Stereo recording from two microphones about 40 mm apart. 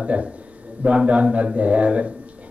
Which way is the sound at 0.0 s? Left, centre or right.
Right.